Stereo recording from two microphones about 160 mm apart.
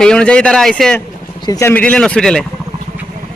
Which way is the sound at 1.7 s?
10° left (ahead or behind).